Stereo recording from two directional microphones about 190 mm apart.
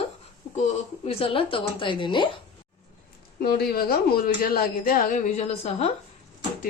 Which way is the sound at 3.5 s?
55° left (ahead or behind).